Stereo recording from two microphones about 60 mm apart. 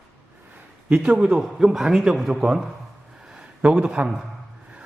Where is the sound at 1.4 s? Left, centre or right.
Centre.